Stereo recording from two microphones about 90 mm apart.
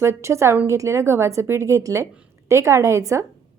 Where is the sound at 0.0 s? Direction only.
30° right (ahead or behind).